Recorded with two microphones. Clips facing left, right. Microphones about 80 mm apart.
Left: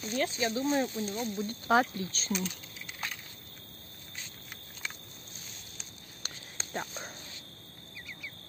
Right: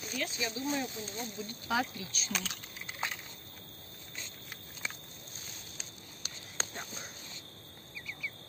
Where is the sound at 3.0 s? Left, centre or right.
Right.